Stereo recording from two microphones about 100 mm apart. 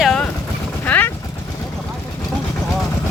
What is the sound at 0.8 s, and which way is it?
Vehicle, 15° left (ahead or behind).